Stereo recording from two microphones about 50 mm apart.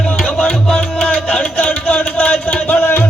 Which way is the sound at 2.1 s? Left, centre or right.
Left.